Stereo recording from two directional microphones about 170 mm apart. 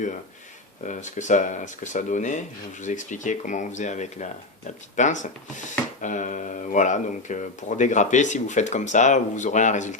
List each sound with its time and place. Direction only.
0.9 s speech: 45° left (ahead or behind)